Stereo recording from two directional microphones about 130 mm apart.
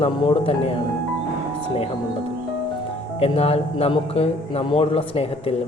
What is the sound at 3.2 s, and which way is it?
Speech, 50° left (ahead or behind).